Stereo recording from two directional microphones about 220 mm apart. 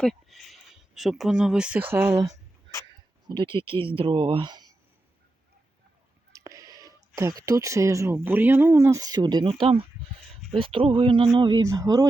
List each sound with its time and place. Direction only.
0.0 s speech: centre (ahead or behind)
3.2 s speech: 20° right (ahead or behind)
6.3 s speech: 15° right (ahead or behind)